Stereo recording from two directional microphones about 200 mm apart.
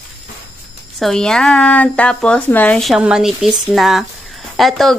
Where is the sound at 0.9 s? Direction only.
Centre (ahead or behind).